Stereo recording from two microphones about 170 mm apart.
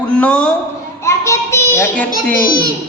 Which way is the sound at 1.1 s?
15° left (ahead or behind).